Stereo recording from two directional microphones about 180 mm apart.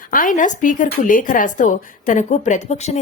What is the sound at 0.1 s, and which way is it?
A woman's voice, 50° left (ahead or behind).